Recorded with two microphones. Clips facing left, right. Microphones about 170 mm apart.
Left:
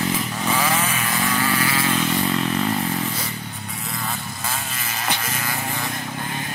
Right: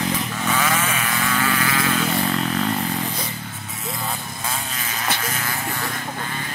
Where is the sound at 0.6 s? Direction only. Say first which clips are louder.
Even; 30° left (ahead or behind).